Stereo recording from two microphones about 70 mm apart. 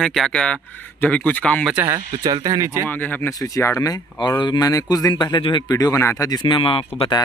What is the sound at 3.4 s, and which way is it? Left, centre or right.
Speech, left.